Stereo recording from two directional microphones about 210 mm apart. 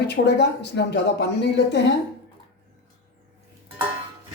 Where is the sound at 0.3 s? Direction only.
55° left (ahead or behind).